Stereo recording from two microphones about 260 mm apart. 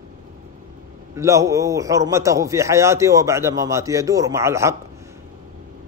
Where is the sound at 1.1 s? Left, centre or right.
Centre.